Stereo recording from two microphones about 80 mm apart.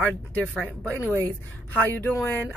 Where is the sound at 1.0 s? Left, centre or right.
Left.